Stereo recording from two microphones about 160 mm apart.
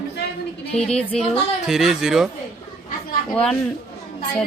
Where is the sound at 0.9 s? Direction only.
5° left (ahead or behind).